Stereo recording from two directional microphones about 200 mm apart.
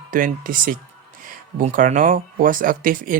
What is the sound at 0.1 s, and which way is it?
Speech, 45° right (ahead or behind).